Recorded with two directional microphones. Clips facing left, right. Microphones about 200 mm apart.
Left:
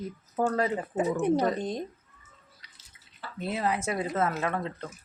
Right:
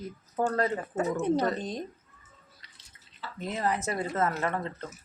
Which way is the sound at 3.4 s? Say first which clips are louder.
Left 1 dB; 10° left (ahead or behind).